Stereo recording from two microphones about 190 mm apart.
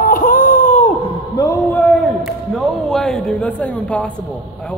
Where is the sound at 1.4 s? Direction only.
20° left (ahead or behind).